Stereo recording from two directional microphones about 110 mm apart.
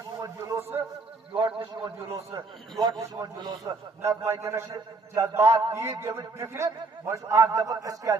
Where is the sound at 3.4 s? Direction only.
40° right (ahead or behind).